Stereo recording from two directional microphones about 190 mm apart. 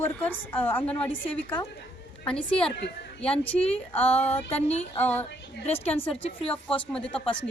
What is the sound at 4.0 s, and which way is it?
Speech, 30° left (ahead or behind).